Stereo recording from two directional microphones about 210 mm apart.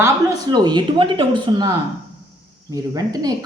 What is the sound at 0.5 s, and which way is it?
A woman's voice, 20° right (ahead or behind).